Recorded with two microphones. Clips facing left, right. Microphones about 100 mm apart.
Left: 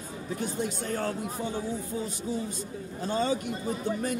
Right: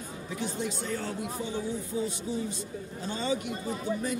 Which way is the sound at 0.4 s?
50° left (ahead or behind).